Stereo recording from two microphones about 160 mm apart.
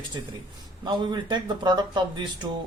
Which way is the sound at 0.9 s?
25° right (ahead or behind).